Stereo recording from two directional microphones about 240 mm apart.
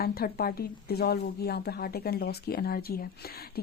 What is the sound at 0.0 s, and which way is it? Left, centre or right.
A woman's voice, left.